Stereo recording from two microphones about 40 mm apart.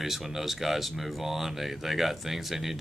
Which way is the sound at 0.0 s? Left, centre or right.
Centre.